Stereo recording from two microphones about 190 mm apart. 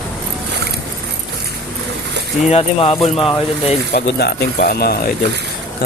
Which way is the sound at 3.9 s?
60° left (ahead or behind).